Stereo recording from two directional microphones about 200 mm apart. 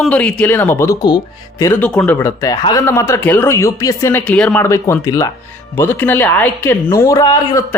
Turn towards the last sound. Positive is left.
turn(degrees=15)  # may be behind; listen again after turning